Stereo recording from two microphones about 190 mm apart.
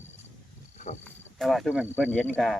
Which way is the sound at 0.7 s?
40° left (ahead or behind).